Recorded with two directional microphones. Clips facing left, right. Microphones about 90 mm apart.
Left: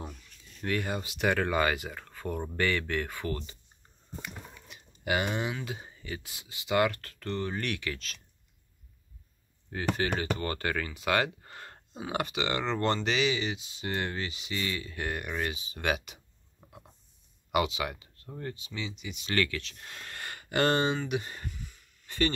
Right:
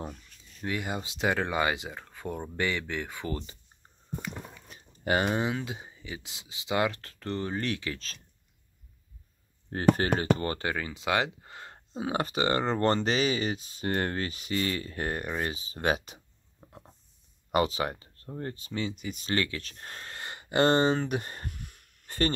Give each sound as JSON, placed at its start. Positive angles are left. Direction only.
{"t": 0.6, "sound": "speech", "side_deg": -15}
{"t": 4.6, "sound": "speech", "side_deg": -35}
{"t": 5.8, "sound": "speech", "side_deg": -20}
{"t": 9.7, "sound": "speech", "side_deg": -45}
{"t": 12.0, "sound": "speech", "side_deg": -35}
{"t": 17.5, "sound": "speech", "side_deg": -35}
{"t": 19.3, "sound": "speech", "side_deg": -30}
{"t": 19.6, "sound": "speech", "side_deg": -40}
{"t": 20.9, "sound": "speech", "side_deg": -45}
{"t": 21.5, "sound": "a sound", "side_deg": -60}